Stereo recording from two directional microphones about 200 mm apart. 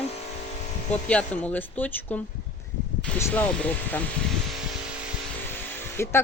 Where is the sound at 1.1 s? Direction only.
5° left (ahead or behind).